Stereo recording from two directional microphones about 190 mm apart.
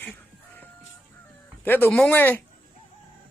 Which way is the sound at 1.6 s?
10° left (ahead or behind).